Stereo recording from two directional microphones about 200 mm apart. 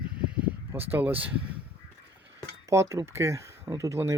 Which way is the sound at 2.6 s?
15° right (ahead or behind).